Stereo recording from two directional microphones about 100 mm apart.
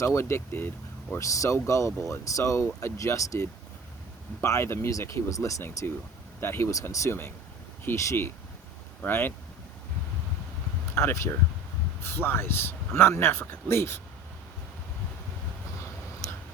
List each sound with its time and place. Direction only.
0.0 s speech: 25° left (ahead or behind)
10.9 s speech: 30° left (ahead or behind)